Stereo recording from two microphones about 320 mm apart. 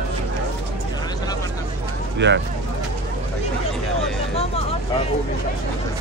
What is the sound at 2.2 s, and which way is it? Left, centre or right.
Speech, right.